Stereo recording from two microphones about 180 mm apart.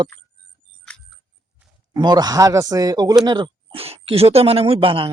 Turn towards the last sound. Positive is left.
turn(degrees=-30)  # may be behind; listen again after turning